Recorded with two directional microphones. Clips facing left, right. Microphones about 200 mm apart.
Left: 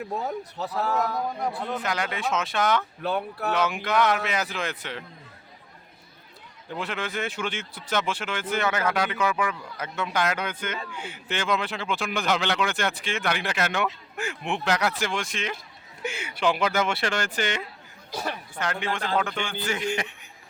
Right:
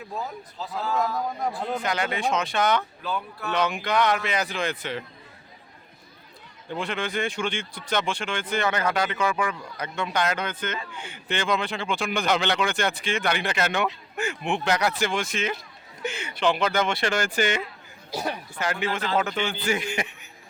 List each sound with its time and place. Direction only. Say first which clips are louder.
0.2 s speech: left 4 dB; 65° left (ahead or behind)
1.8 s a man's voice: right 3 dB; centre (ahead or behind)
3.0 s speech: left 4 dB; 60° left (ahead or behind)
3.5 s a man's voice: right 1 dB; 5° left (ahead or behind)
6.7 s a man's voice: right 2 dB; 5° left (ahead or behind)
16.0 s speech: right 1 dB; 10° left (ahead or behind)
17.2 s a man's voice: right 3 dB; 10° right (ahead or behind)